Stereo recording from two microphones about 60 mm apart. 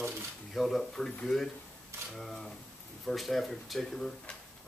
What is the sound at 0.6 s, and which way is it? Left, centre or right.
Speech, centre.